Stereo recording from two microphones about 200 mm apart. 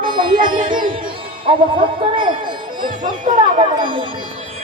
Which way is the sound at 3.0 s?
40° right (ahead or behind).